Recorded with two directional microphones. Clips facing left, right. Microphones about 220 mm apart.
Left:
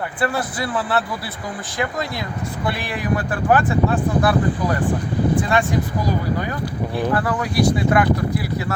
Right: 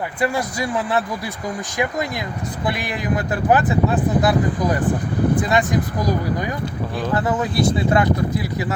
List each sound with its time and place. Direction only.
0.2 s speech: 15° right (ahead or behind)